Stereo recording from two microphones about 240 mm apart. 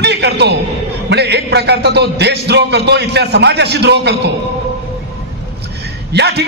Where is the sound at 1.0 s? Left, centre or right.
Right.